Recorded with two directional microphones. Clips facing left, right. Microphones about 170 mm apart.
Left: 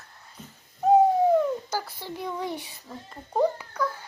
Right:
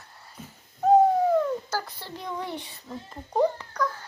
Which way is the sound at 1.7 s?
10° left (ahead or behind).